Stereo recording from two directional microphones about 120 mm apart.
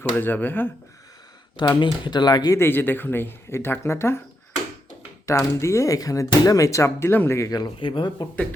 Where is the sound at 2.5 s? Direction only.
15° left (ahead or behind).